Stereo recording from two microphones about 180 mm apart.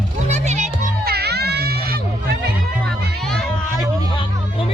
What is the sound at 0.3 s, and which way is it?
Music, 40° right (ahead or behind).